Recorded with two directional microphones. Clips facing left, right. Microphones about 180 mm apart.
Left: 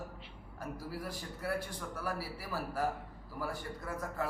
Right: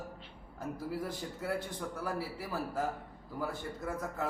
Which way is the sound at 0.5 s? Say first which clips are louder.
Right 4 dB; 20° right (ahead or behind).